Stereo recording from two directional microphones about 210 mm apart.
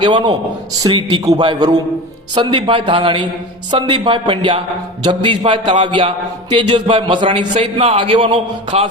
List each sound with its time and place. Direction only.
0.0 s a man's voice: 20° right (ahead or behind)